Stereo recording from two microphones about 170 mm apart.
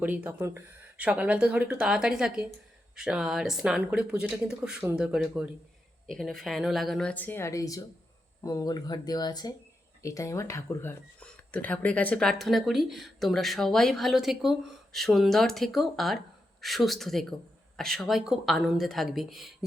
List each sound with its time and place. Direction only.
0.0 s speech: 10° right (ahead or behind)